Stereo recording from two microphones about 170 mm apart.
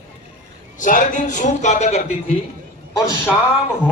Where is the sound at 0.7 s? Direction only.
50° left (ahead or behind).